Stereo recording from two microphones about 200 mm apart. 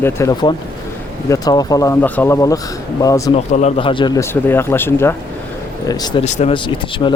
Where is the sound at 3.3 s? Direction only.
30° left (ahead or behind).